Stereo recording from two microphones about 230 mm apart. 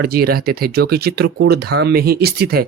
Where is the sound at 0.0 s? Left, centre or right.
Right.